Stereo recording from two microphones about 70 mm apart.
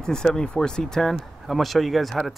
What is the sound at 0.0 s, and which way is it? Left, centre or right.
Speech, centre.